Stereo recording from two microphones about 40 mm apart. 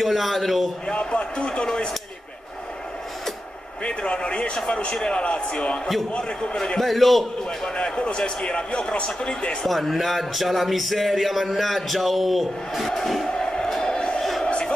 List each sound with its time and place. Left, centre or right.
0.0 s speech: centre
0.8 s speech: left
3.8 s speech: left
6.8 s speech: centre
7.6 s speech: left
9.7 s speech: centre
13.3 s a sound: centre